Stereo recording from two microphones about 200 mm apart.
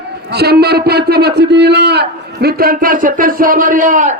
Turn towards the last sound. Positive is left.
turn(degrees=-40)  # may be behind; listen again after turning